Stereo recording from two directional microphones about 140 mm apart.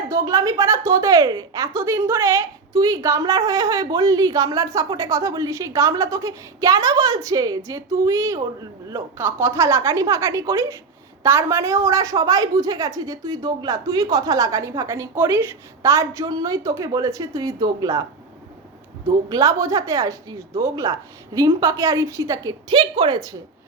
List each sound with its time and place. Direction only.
0.1 s a woman's voice: 25° right (ahead or behind)
19.3 s a woman's voice: 25° right (ahead or behind)